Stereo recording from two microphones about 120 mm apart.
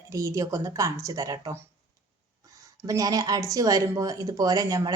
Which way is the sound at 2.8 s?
30° right (ahead or behind).